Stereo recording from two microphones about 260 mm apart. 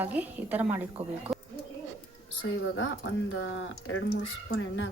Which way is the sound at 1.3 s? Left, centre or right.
Centre.